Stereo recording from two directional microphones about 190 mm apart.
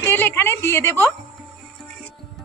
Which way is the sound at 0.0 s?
10° left (ahead or behind).